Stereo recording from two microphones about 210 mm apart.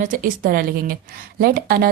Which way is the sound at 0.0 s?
40° right (ahead or behind).